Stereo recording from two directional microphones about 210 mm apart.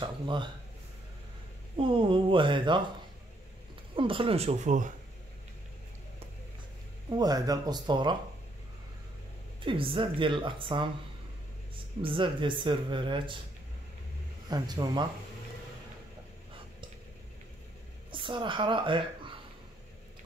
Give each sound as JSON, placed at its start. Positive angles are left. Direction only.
{"t": 0.0, "sound": "speech", "side_deg": -20}
{"t": 1.8, "sound": "speech", "side_deg": -25}
{"t": 3.9, "sound": "speech", "side_deg": -25}
{"t": 7.1, "sound": "speech", "side_deg": -20}
{"t": 9.6, "sound": "speech", "side_deg": -25}
{"t": 12.0, "sound": "speech", "side_deg": -25}
{"t": 14.5, "sound": "speech", "side_deg": -20}
{"t": 18.1, "sound": "a woman's voice", "side_deg": -25}